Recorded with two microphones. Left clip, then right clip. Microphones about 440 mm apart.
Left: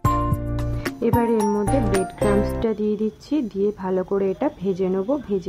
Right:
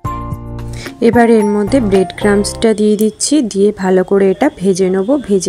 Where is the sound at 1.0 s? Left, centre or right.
Left.